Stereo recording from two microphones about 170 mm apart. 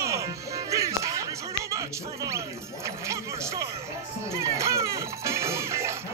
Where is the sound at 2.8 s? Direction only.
15° right (ahead or behind).